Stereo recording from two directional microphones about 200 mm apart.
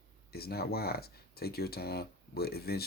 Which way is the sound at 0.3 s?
50° left (ahead or behind).